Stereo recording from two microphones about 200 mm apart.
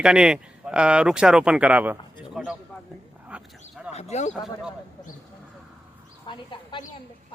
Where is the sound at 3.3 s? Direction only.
5° right (ahead or behind).